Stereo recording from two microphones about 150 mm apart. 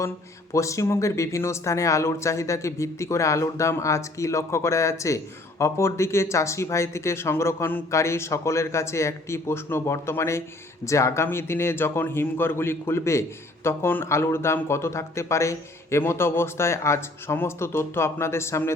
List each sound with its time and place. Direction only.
0.5 s speech: 20° left (ahead or behind)